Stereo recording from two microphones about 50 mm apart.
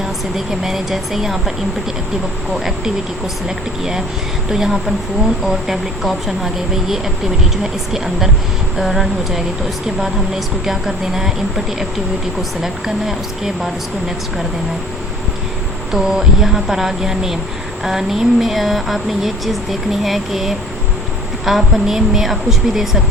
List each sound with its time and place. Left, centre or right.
0.3 s speech: centre
4.4 s speech: centre
10.7 s speech: centre
15.9 s speech: centre